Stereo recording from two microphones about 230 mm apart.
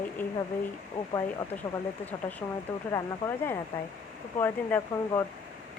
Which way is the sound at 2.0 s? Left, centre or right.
Centre.